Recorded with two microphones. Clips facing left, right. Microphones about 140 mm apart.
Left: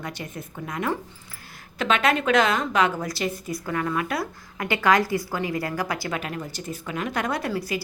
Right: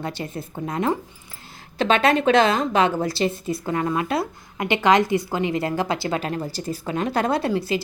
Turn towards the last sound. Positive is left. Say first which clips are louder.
# right 5 dB
turn(degrees=-25)  # may be behind; listen again after turning